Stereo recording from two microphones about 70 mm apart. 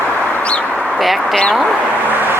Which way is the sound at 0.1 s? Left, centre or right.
Left.